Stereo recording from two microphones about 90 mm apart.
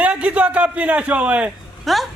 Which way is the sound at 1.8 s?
Centre (ahead or behind).